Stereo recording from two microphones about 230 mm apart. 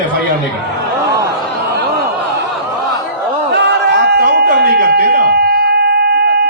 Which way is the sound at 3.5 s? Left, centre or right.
Right.